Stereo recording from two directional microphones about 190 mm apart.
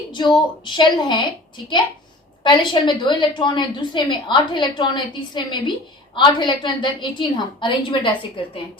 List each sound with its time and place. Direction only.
0.1 s a woman's voice: 25° left (ahead or behind)